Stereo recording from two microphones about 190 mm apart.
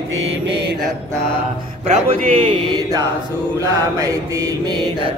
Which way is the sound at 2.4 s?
25° right (ahead or behind).